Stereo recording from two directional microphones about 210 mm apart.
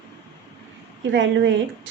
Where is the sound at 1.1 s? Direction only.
60° right (ahead or behind).